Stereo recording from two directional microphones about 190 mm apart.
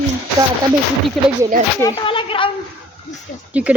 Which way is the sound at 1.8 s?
25° left (ahead or behind).